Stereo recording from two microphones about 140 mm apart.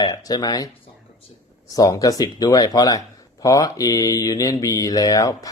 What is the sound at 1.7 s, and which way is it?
Speech, 25° left (ahead or behind).